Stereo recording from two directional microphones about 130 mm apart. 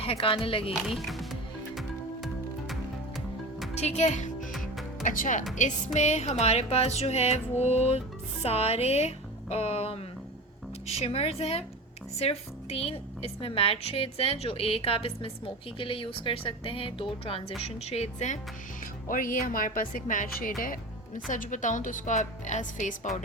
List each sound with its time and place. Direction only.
0.0 s music: 45° left (ahead or behind)
0.7 s music: centre (ahead or behind)
3.8 s a child's voice: 60° left (ahead or behind)
5.0 s speech: 90° left
5.5 s speech: 70° left (ahead or behind)
6.4 s music: 55° left (ahead or behind)
17.6 s speech: 55° left (ahead or behind)
19.0 s a woman's voice: 90° left; by 23.0 s 65° left (ahead or behind)